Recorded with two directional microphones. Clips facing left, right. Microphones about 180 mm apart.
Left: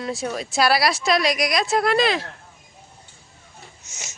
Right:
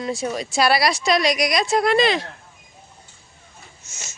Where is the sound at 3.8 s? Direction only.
15° left (ahead or behind).